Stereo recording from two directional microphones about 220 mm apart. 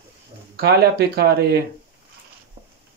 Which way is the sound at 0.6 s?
45° right (ahead or behind).